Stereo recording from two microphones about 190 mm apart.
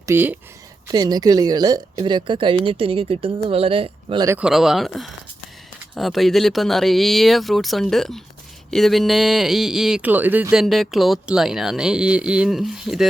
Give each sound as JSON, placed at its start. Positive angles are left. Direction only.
{"t": 0.0, "sound": "a woman's voice", "side_deg": -10}
{"t": 4.3, "sound": "speech", "side_deg": -5}